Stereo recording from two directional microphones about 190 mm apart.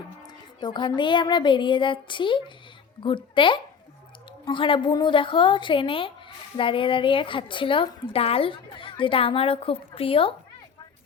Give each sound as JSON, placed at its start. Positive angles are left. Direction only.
{"t": 0.2, "sound": "speech", "side_deg": 20}